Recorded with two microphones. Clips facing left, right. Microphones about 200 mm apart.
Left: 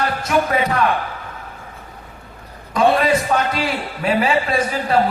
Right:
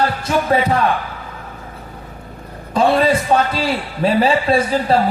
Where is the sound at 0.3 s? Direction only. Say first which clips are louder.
Right 1 dB; 30° right (ahead or behind).